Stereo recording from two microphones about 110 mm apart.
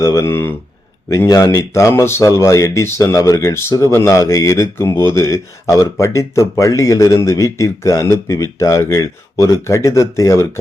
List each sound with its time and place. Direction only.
0.0 s speech: 30° left (ahead or behind)